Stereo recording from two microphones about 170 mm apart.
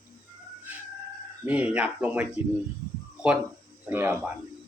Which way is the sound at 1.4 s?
10° right (ahead or behind).